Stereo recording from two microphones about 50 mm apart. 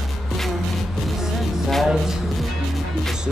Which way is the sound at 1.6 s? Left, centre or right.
Centre.